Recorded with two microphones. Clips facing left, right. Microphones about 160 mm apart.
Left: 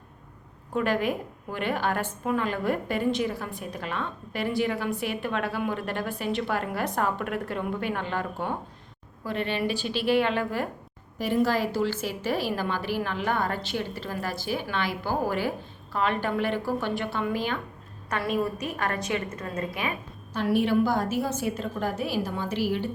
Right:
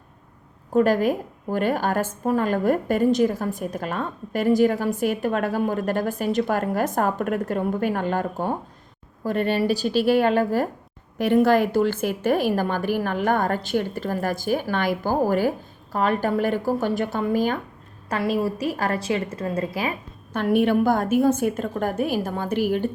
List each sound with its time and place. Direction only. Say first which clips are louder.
0.7 s a woman's voice: right 7 dB; 40° right (ahead or behind)
11.2 s a woman's voice: right 7 dB; 60° right (ahead or behind); by 17.6 s 40° right (ahead or behind)
18.1 s a woman's voice: right 4 dB; 30° right (ahead or behind)
20.3 s a woman's voice: right 4 dB; 55° right (ahead or behind)